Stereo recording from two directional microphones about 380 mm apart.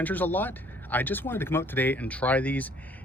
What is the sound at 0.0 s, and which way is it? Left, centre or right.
Speech, centre.